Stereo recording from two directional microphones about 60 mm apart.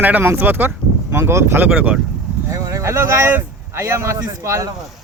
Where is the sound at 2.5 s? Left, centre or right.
Right.